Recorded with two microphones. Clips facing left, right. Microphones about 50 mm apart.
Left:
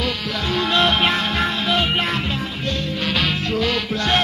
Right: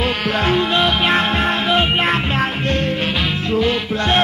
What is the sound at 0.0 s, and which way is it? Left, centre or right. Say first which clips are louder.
Music: right 6 dB; right.